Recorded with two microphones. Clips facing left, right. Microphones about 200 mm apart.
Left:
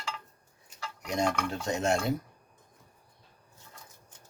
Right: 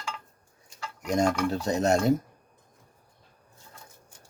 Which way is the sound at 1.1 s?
40° right (ahead or behind).